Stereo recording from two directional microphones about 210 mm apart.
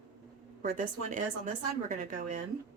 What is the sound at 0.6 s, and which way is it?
A woman's voice, 40° right (ahead or behind).